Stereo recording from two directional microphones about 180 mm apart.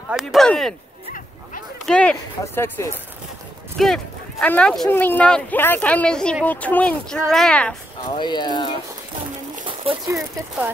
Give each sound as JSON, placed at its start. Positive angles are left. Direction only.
{"t": 0.1, "sound": "speech", "side_deg": 0}
{"t": 1.9, "sound": "speech", "side_deg": 5}
{"t": 8.2, "sound": "speech", "side_deg": 25}
{"t": 10.0, "sound": "speech", "side_deg": -15}